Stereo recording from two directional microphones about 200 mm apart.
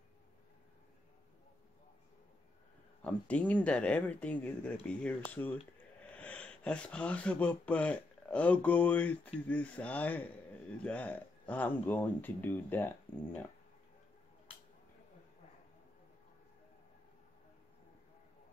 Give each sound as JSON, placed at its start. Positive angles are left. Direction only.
{"t": 3.0, "sound": "a man's voice", "side_deg": 5}